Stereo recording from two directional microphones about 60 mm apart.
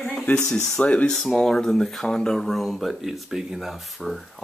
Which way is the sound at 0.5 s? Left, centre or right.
Centre.